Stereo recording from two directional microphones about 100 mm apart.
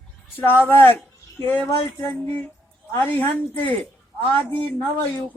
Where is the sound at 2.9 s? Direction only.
20° left (ahead or behind).